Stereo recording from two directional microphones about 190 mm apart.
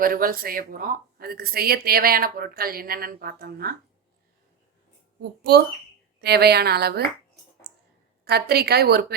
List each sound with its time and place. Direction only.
0.0 s speech: 50° right (ahead or behind)
5.4 s a woman's voice: 55° right (ahead or behind)
7.6 s clicking: 55° right (ahead or behind)
8.2 s a woman's voice: 55° right (ahead or behind)